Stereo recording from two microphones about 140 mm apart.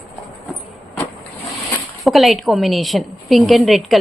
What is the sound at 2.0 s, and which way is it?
Speech, centre (ahead or behind).